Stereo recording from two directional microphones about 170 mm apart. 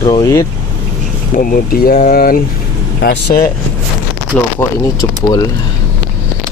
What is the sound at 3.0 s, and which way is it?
Speech, 70° left (ahead or behind).